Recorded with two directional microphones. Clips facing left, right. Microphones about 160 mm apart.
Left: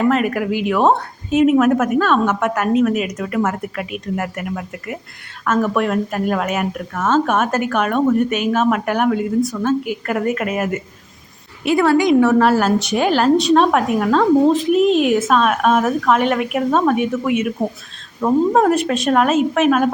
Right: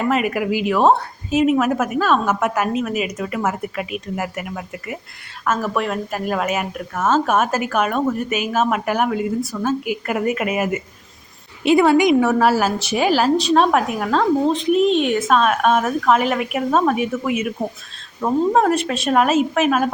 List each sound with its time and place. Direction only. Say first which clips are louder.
0.0 s a woman's voice: left 3 dB; 5° right (ahead or behind)
11.6 s a woman's voice: right 1 dB; 20° right (ahead or behind)
12.3 s a woman's voice: left 3 dB; 5° right (ahead or behind)